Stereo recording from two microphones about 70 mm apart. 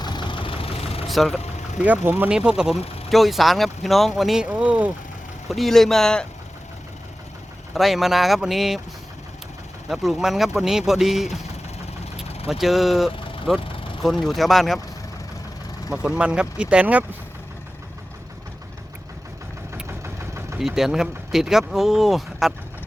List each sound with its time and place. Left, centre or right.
0.0 s vehicle: left
1.0 s speech: centre
1.8 s speech: right
2.3 s speech: centre
3.1 s speech: centre
4.4 s speech: centre
5.5 s speech: centre
7.7 s speech: centre
9.9 s speech: centre
15.9 s speech: centre
19.9 s vehicle: right
20.6 s speech: centre